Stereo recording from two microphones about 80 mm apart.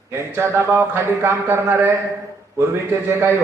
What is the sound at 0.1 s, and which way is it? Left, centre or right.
Speech, right.